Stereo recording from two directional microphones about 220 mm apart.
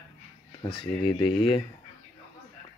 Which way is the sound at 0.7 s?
25° left (ahead or behind).